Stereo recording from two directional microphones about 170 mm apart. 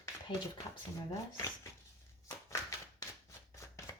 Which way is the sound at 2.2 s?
20° left (ahead or behind).